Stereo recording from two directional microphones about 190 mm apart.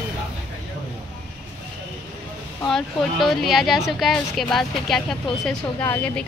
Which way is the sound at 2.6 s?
Centre (ahead or behind).